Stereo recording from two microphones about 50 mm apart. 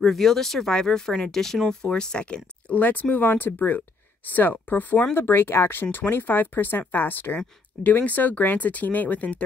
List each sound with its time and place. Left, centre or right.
0.0 s speech: centre
2.7 s speech: left
5.1 s speech: left